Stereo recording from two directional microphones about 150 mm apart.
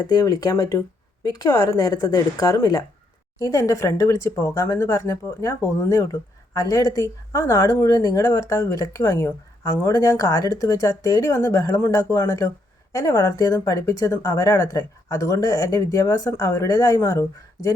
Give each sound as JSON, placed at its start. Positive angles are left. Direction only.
{"t": 0.0, "sound": "speech", "side_deg": 25}